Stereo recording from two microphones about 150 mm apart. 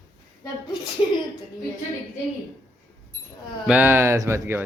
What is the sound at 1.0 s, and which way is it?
Speech, 35° left (ahead or behind).